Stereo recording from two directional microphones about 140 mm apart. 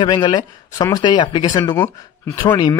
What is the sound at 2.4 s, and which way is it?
Speech, 30° left (ahead or behind).